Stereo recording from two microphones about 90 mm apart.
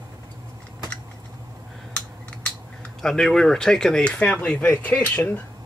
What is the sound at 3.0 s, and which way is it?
Speech, 5° left (ahead or behind).